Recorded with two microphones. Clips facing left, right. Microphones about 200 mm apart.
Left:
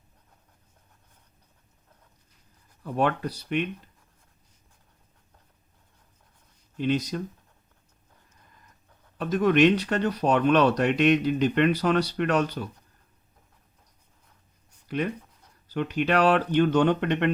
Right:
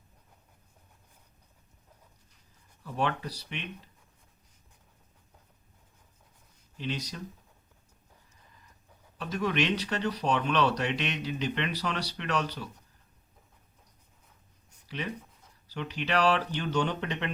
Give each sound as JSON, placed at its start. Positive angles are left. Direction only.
{"t": 2.8, "sound": "speech", "side_deg": 55}
{"t": 6.7, "sound": "speech", "side_deg": 50}
{"t": 9.1, "sound": "speech", "side_deg": 50}
{"t": 14.8, "sound": "speech", "side_deg": 50}